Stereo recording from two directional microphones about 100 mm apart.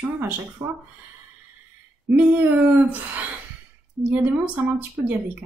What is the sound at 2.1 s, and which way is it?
Speech, 15° right (ahead or behind).